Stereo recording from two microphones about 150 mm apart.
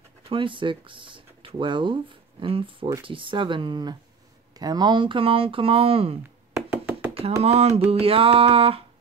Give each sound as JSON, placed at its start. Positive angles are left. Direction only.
{"t": 0.2, "sound": "speech", "side_deg": -35}
{"t": 6.5, "sound": "knock", "side_deg": -15}
{"t": 7.4, "sound": "speech", "side_deg": -45}